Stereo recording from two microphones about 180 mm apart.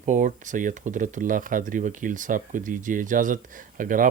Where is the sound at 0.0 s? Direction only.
45° right (ahead or behind).